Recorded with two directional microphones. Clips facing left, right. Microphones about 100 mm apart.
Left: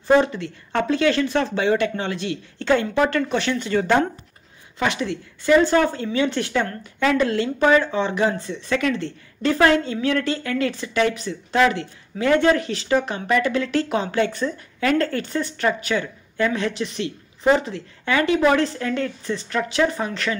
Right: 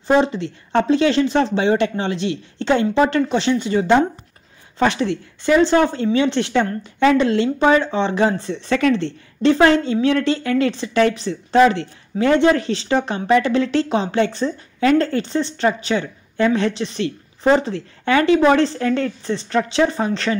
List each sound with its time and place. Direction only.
0.0 s speech: 20° right (ahead or behind)
4.7 s speech: 30° right (ahead or behind)